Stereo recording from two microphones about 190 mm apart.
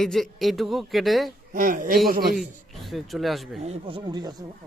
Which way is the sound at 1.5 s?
45° right (ahead or behind).